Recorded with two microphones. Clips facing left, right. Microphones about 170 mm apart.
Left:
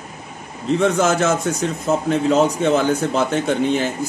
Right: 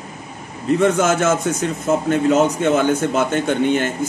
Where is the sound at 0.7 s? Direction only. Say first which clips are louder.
Right 1 dB; 5° right (ahead or behind).